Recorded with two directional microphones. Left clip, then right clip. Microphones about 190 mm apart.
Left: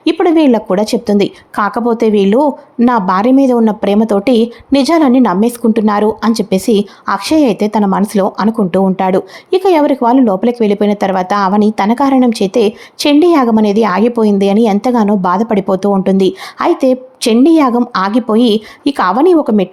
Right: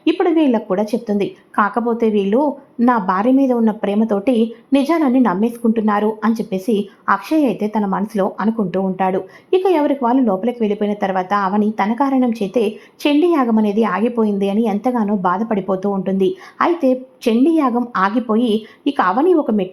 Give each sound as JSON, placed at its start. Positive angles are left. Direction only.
{"t": 0.0, "sound": "a woman's voice", "side_deg": 35}